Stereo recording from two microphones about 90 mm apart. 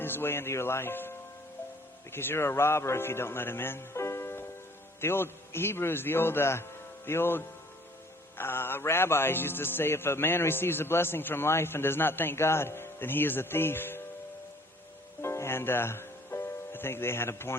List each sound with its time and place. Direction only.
0.0 s a man's voice: 25° left (ahead or behind)
2.1 s a man's voice: 25° left (ahead or behind)
15.2 s music: 30° left (ahead or behind)